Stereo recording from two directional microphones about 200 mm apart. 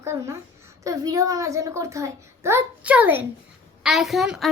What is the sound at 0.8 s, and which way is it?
A child's voice, 15° right (ahead or behind).